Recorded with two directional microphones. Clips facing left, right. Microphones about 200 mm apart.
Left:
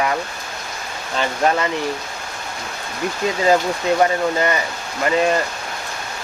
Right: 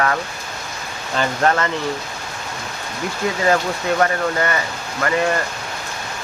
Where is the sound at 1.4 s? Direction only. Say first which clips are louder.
Even; 15° left (ahead or behind).